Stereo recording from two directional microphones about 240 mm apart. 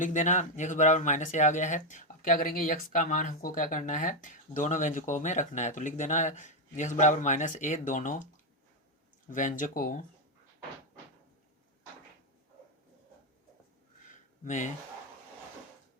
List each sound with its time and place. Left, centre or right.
0.0 s speech: left
9.2 s speech: left
14.4 s speech: left